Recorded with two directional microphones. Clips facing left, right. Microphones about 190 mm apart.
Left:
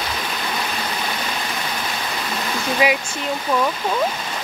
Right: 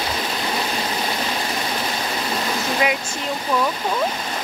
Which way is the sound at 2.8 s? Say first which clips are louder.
Left 3 dB; 10° left (ahead or behind).